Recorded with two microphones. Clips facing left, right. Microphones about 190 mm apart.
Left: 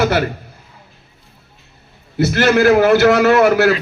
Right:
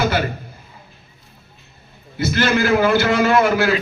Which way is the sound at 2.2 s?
70° left (ahead or behind).